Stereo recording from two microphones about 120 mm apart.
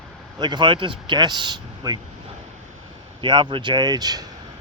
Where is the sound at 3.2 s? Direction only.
40° right (ahead or behind).